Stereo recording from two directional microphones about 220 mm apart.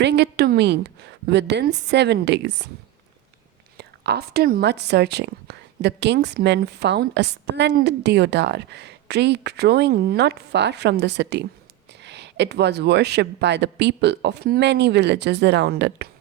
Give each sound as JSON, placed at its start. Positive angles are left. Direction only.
{"t": 0.0, "sound": "a woman's voice", "side_deg": -50}
{"t": 3.8, "sound": "a woman's voice", "side_deg": -50}